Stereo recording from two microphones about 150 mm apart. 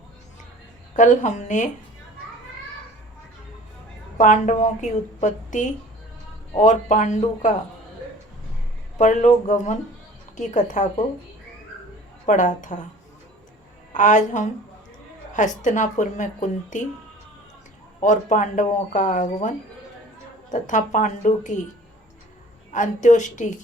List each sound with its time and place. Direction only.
0.9 s speech: 55° left (ahead or behind)
4.2 s speech: 55° left (ahead or behind)
9.0 s speech: 55° left (ahead or behind)
12.2 s speech: 55° left (ahead or behind)
13.9 s speech: 55° left (ahead or behind)
18.0 s speech: 55° left (ahead or behind)
22.7 s speech: 55° left (ahead or behind)